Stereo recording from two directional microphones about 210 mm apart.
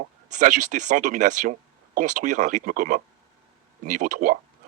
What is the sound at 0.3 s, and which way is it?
Speech, 35° right (ahead or behind).